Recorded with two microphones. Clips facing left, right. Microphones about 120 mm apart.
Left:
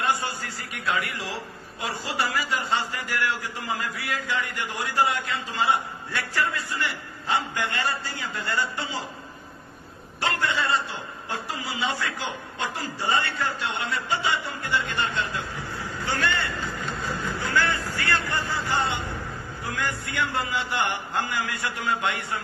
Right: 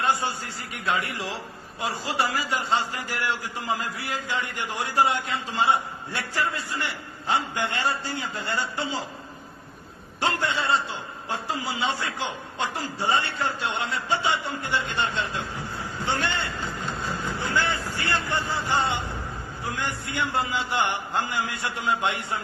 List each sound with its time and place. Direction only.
0.0 s a man's voice: 25° right (ahead or behind)
10.2 s a man's voice: 25° right (ahead or behind)